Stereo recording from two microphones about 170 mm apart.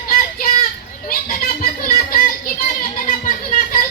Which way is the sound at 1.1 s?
60° left (ahead or behind).